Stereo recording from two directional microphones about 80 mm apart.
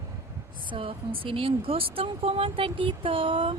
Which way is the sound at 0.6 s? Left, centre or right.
Right.